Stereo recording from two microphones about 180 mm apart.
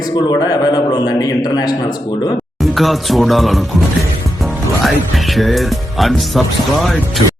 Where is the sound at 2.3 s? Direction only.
Centre (ahead or behind).